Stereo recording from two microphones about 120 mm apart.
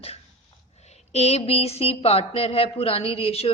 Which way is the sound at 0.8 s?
65° left (ahead or behind).